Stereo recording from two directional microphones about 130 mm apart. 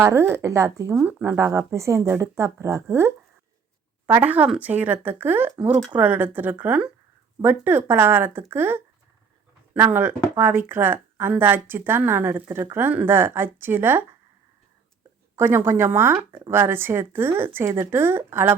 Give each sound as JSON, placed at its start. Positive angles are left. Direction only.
{"t": 0.0, "sound": "speech", "side_deg": -20}
{"t": 1.0, "sound": "speech", "side_deg": -10}
{"t": 1.4, "sound": "speech", "side_deg": -20}
{"t": 15.4, "sound": "speech", "side_deg": -15}